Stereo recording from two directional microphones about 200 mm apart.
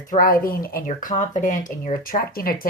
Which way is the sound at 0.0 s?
45° left (ahead or behind).